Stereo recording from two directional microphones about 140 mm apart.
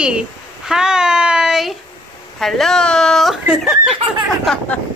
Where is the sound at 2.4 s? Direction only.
5° left (ahead or behind).